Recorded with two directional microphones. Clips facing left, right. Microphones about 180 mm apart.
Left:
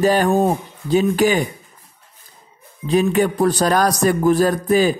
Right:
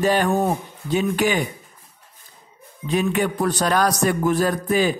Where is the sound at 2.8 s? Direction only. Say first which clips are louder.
Left 5 dB; 35° left (ahead or behind).